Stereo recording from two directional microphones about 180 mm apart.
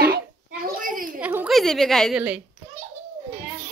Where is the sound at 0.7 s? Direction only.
50° right (ahead or behind).